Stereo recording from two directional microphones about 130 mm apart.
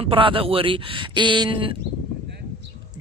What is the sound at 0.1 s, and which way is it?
Speech, 40° right (ahead or behind).